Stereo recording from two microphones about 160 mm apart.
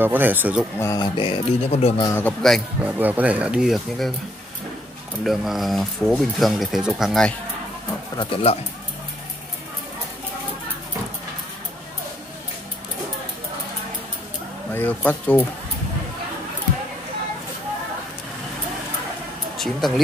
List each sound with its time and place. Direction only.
0.0 s speech: 10° right (ahead or behind)
0.7 s speech: 20° left (ahead or behind); by 2.0 s 40° left (ahead or behind)
2.0 s speech: 20° left (ahead or behind)
2.2 s speech: centre (ahead or behind)
2.8 s speech: 10° right (ahead or behind)
5.2 s speech: centre (ahead or behind)
8.2 s speech: 35° left (ahead or behind)
14.7 s speech: 10° left (ahead or behind)
19.5 s speech: centre (ahead or behind)